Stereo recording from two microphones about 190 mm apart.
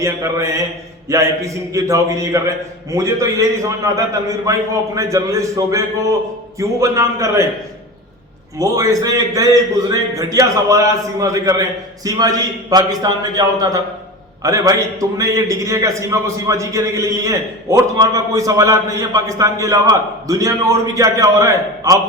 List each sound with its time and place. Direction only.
0.0 s a man's voice: 15° right (ahead or behind)
8.5 s a man's voice: 15° right (ahead or behind)